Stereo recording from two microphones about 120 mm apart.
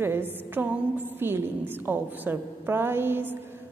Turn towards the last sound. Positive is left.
turn(degrees=-15)  # may be behind; listen again after turning